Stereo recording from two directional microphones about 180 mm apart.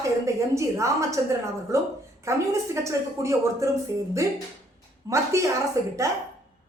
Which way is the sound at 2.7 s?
15° right (ahead or behind).